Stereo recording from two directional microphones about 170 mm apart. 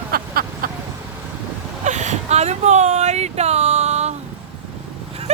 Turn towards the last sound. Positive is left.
turn(degrees=-40)  # may be behind; listen again after turning